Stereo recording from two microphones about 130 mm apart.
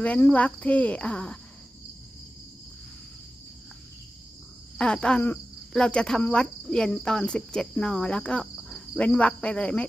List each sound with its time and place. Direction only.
0.0 s cricket: 10° left (ahead or behind)
4.7 s cricket: 5° left (ahead or behind)